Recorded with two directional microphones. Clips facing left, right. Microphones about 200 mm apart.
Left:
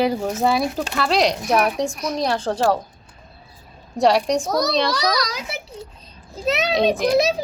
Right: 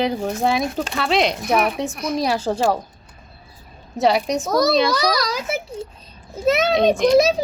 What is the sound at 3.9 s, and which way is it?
Speech, 5° right (ahead or behind).